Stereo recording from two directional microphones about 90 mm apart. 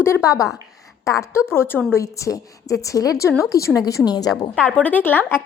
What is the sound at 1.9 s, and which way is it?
A woman's voice, 35° left (ahead or behind).